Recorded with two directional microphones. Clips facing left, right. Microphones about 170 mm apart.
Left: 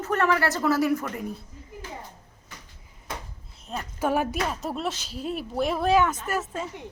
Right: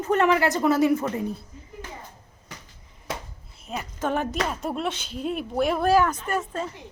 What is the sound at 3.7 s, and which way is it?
Speech, 5° right (ahead or behind).